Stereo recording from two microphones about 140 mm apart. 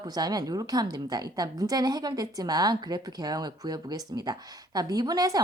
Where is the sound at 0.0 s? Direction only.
30° right (ahead or behind).